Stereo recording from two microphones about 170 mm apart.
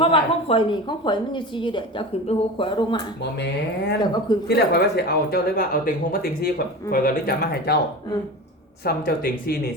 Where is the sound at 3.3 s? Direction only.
90° left.